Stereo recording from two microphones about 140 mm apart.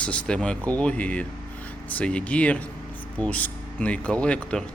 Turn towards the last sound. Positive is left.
turn(degrees=5)  # may be behind; listen again after turning